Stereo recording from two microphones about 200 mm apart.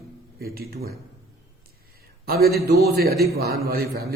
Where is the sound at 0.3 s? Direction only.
50° right (ahead or behind).